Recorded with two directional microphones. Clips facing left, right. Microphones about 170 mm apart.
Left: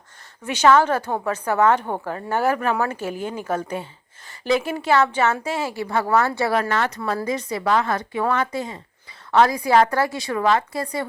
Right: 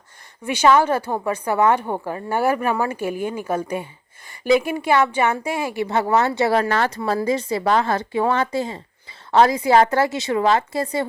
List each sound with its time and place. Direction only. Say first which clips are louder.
0.4 s a woman's voice: even; 10° right (ahead or behind); by 11.0 s 25° right (ahead or behind)